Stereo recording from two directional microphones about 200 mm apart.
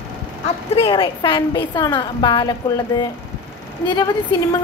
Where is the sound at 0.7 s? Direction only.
25° left (ahead or behind).